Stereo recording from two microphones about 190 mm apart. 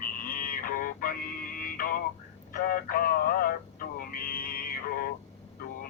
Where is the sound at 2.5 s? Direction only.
50° left (ahead or behind).